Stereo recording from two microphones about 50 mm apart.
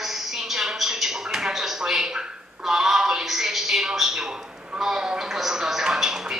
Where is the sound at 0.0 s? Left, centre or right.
Centre.